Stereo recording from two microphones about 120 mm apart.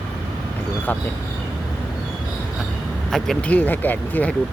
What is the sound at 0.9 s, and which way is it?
Speech, 15° left (ahead or behind).